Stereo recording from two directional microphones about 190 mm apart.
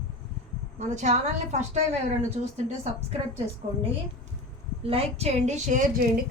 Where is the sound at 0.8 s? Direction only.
40° right (ahead or behind).